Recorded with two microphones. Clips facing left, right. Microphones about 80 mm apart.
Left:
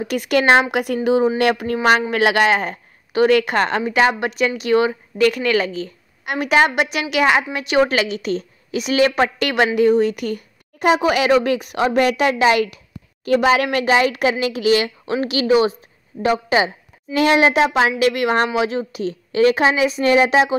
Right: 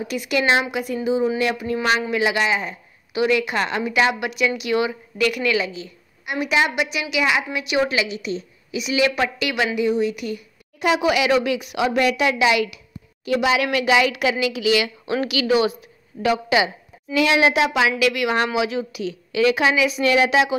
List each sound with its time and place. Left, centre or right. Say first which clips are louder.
0.0 s speech: left 4 dB; left
1.8 s a woman's voice: left 4 dB; left